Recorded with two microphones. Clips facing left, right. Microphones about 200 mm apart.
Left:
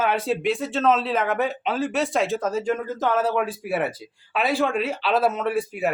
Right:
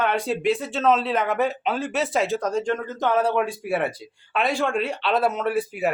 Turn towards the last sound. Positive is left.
turn(degrees=0)  # may be behind; listen again after turning